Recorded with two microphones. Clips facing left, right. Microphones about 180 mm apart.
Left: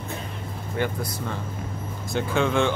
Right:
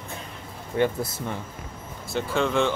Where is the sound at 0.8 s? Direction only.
25° right (ahead or behind).